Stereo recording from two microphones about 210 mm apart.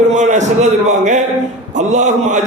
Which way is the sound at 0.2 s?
35° right (ahead or behind).